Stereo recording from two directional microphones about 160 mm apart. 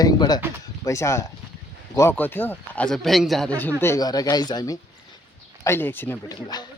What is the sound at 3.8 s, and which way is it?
Speech, 20° left (ahead or behind).